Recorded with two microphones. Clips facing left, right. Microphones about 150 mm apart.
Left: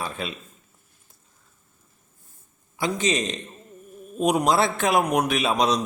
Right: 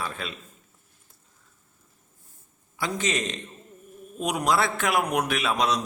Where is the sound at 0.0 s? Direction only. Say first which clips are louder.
Left 3 dB; 20° left (ahead or behind).